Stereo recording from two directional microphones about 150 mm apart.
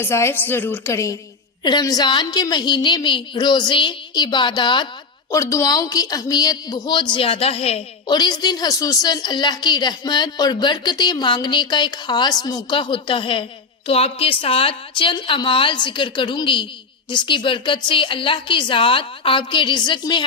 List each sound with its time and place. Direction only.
0.0 s a woman's voice: 15° left (ahead or behind); by 7.9 s 40° left (ahead or behind)
8.0 s a woman's voice: 30° left (ahead or behind)